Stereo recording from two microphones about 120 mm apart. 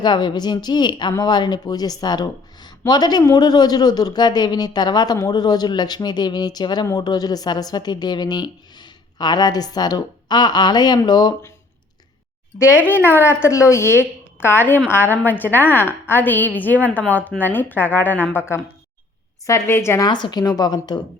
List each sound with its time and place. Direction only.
0.0 s speech: 40° left (ahead or behind)
12.5 s a woman's voice: 20° left (ahead or behind)
20.1 s speech: 40° left (ahead or behind)